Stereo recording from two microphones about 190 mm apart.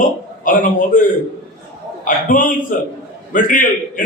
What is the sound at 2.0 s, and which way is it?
A man's voice, 45° left (ahead or behind).